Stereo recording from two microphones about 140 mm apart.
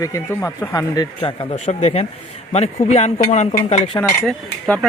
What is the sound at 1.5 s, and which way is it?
Speech, 55° left (ahead or behind).